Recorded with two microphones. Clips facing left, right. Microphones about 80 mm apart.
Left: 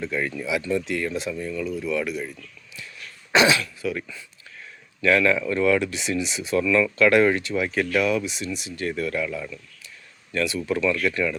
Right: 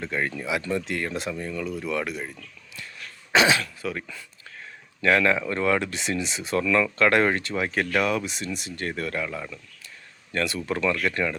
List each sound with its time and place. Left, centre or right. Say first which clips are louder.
0.0 s speech: left 1 dB; right
3.4 s speech: left 2 dB; right
5.0 s speech: left 1 dB; right
10.3 s speech: left 2 dB; right